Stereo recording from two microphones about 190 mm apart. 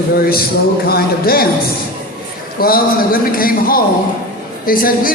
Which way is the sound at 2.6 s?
50° left (ahead or behind).